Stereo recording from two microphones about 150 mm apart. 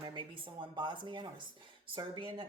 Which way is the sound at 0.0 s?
30° right (ahead or behind).